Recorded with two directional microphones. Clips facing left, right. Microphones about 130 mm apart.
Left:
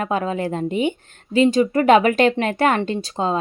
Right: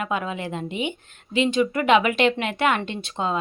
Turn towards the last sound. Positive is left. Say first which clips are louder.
# left 5 dB
turn(degrees=35)  # may be behind; listen again after turning